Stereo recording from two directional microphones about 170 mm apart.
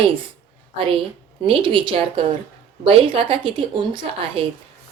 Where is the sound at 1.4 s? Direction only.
30° right (ahead or behind).